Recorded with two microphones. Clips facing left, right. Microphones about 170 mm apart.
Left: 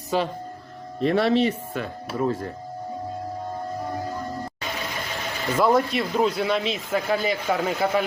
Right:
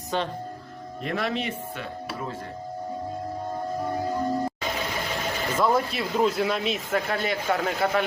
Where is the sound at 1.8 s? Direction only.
45° left (ahead or behind).